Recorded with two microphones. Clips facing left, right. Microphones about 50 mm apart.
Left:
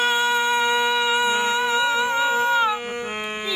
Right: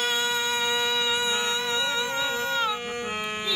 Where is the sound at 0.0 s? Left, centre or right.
Centre.